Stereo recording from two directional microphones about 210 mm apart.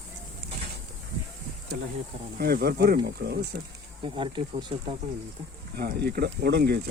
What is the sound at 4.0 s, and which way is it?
Speech, 25° right (ahead or behind).